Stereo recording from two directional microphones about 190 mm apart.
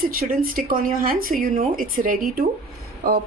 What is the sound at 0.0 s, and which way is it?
Speech, 50° right (ahead or behind).